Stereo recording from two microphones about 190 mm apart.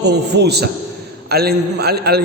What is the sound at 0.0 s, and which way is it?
A man's voice, 60° right (ahead or behind).